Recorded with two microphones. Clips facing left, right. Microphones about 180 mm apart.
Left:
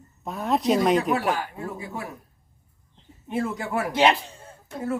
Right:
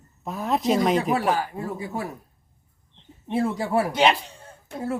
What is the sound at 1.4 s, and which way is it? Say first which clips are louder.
Speech: right 3 dB; 40° right (ahead or behind).